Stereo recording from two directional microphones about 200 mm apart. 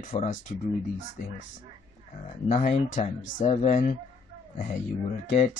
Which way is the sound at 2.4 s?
35° left (ahead or behind).